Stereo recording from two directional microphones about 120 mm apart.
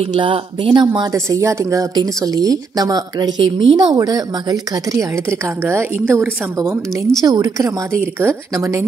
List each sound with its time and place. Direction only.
0.1 s speech: 45° right (ahead or behind)
1.1 s speech: 25° right (ahead or behind)
8.0 s speech: 15° right (ahead or behind)